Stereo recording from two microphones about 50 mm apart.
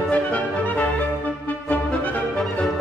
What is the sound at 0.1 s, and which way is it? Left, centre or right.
Music, left.